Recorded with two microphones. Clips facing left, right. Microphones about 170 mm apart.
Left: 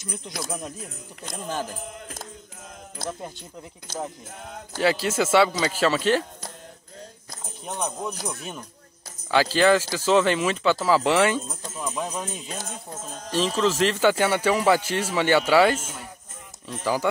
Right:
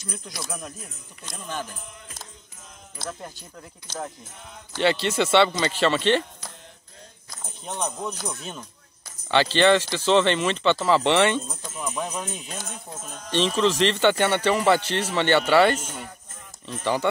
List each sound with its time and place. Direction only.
0.0 s speech: 20° left (ahead or behind)
1.2 s speech: 40° left (ahead or behind)
3.1 s speech: 20° left (ahead or behind)
4.7 s speech: 5° left (ahead or behind)
7.6 s speech: 5° left (ahead or behind)
13.3 s speech: 5° left (ahead or behind)